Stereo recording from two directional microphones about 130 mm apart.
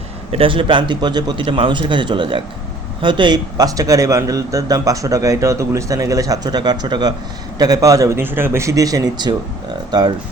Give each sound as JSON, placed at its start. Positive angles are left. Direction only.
{"t": 0.3, "sound": "a man's voice", "side_deg": -45}